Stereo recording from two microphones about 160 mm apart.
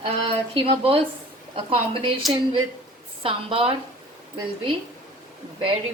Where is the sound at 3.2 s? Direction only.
35° right (ahead or behind).